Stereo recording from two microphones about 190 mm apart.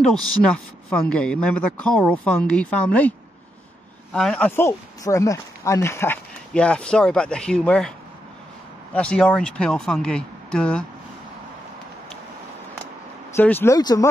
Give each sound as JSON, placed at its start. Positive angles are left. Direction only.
{"t": 0.0, "sound": "speech", "side_deg": 0}
{"t": 8.9, "sound": "speech", "side_deg": 5}
{"t": 13.4, "sound": "speech", "side_deg": 10}